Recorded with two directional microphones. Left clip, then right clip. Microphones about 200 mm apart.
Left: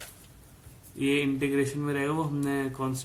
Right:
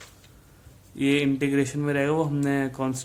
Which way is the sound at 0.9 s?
45° right (ahead or behind).